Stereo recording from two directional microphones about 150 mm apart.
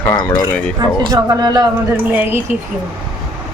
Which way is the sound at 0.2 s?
25° left (ahead or behind).